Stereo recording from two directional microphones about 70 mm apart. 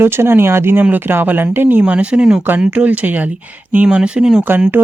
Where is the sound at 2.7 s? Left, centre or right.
Right.